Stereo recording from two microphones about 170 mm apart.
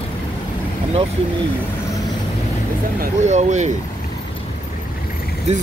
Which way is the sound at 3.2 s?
45° right (ahead or behind).